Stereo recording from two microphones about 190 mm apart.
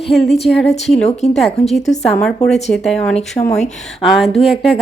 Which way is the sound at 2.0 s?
5° left (ahead or behind).